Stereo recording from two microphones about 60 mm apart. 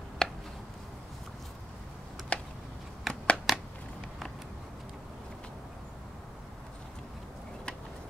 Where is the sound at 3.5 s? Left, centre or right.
Centre.